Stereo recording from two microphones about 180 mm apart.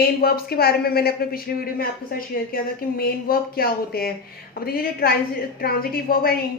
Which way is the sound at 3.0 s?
55° left (ahead or behind).